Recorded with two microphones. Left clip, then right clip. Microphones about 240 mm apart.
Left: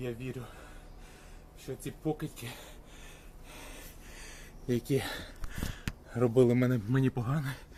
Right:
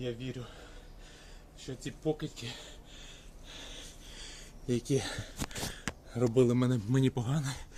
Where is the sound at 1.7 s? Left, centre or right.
Centre.